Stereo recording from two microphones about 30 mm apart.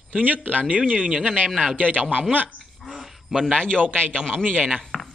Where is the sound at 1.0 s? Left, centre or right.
Right.